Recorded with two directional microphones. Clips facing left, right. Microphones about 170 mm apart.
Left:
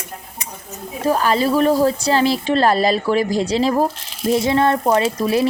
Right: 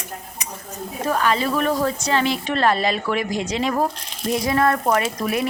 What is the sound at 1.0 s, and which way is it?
Speech, 35° left (ahead or behind).